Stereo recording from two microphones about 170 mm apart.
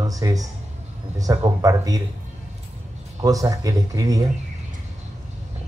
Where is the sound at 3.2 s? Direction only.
20° right (ahead or behind).